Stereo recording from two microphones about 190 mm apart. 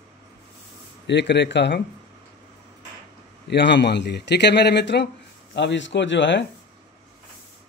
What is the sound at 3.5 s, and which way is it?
A man's voice, 65° left (ahead or behind).